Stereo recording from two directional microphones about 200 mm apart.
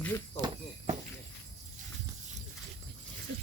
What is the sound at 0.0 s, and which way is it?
Speech, 10° left (ahead or behind).